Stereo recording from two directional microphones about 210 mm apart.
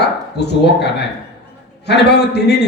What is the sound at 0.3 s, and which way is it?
A man's voice, 50° left (ahead or behind).